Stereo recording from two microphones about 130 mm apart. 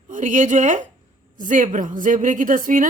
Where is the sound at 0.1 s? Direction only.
80° right.